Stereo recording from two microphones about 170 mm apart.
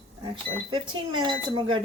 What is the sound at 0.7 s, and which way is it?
Speech, 25° right (ahead or behind).